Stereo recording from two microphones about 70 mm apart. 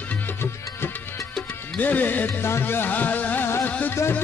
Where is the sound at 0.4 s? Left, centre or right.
Left.